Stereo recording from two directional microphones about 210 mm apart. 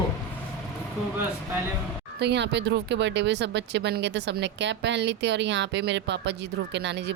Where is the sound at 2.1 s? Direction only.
55° right (ahead or behind).